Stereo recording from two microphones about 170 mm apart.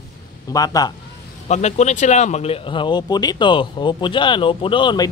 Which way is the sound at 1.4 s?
40° left (ahead or behind).